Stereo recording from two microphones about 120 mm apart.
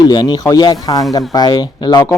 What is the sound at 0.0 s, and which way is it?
A man's voice, 35° left (ahead or behind).